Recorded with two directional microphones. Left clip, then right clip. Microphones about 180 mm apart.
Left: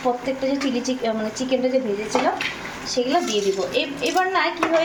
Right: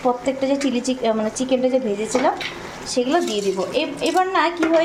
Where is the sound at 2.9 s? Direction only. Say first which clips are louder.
Right 1 dB; 15° right (ahead or behind).